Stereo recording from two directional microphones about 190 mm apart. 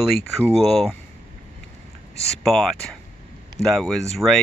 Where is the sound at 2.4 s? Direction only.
Centre (ahead or behind).